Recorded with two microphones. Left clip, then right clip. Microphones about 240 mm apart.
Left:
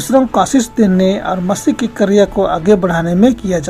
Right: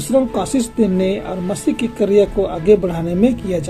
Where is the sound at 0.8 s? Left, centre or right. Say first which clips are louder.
Left 3 dB; left.